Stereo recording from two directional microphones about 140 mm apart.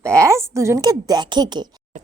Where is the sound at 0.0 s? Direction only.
20° right (ahead or behind).